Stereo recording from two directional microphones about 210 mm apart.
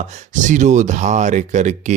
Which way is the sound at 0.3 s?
35° right (ahead or behind).